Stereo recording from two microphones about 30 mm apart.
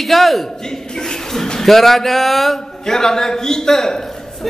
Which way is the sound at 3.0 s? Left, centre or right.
Centre.